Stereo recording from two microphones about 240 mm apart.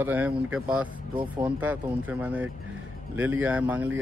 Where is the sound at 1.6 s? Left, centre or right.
Centre.